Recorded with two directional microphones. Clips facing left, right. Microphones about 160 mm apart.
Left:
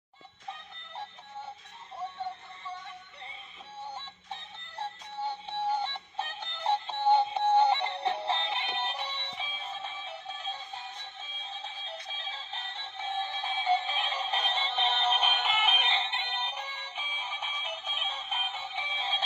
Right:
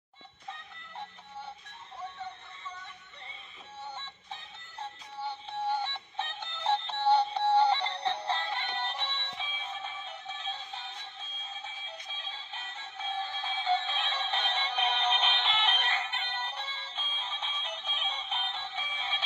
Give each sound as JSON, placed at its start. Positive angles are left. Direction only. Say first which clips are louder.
{"t": 5.7, "sound": "music", "louder": "left 1 dB", "side_deg": 10}
{"t": 13.0, "sound": "synthetic singing", "louder": "left 2 dB", "side_deg": 20}
{"t": 15.9, "sound": "music", "louder": "left 2 dB", "side_deg": 20}